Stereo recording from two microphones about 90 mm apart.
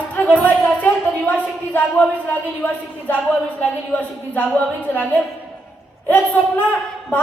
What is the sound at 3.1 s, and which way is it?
A woman's voice, 20° left (ahead or behind).